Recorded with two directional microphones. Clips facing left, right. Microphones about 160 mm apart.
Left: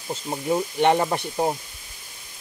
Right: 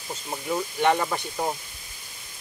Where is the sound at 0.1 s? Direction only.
25° left (ahead or behind).